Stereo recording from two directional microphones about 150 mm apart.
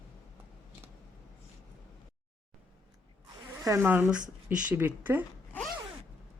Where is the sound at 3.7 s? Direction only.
15° right (ahead or behind).